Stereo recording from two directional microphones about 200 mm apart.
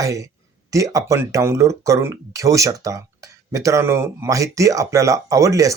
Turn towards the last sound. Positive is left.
turn(degrees=-15)  # may be behind; listen again after turning